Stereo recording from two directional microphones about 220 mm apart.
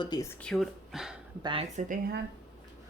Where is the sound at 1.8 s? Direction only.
35° right (ahead or behind).